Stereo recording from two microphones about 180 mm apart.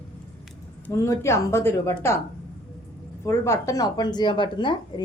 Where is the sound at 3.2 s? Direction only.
15° left (ahead or behind).